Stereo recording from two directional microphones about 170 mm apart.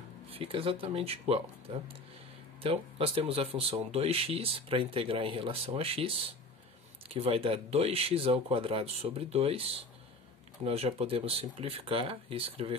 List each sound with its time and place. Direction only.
0.3 s speech: 30° right (ahead or behind)
2.6 s speech: 35° right (ahead or behind)
7.2 s speech: 35° right (ahead or behind)